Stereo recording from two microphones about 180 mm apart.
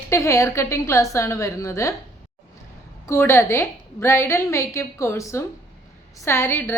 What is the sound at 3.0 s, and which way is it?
A woman's voice, 15° left (ahead or behind).